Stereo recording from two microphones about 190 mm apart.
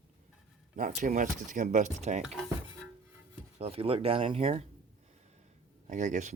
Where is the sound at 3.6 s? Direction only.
30° right (ahead or behind).